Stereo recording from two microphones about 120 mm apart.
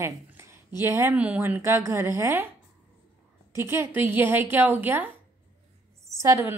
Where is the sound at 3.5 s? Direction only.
20° right (ahead or behind).